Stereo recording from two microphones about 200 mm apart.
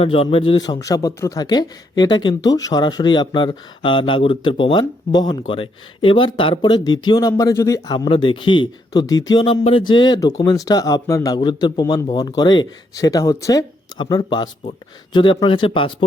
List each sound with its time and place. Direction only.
0.0 s speech: 30° left (ahead or behind)